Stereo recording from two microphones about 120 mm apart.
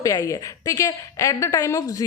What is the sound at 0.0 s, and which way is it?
A woman's voice, 25° left (ahead or behind).